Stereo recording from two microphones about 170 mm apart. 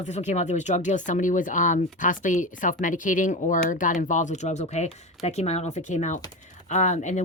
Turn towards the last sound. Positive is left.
turn(degrees=45)  # may be behind; listen again after turning